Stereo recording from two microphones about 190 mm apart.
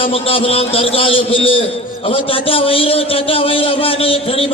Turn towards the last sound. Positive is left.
turn(degrees=30)  # may be behind; listen again after turning